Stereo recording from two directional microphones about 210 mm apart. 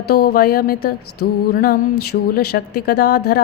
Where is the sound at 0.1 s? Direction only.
50° left (ahead or behind).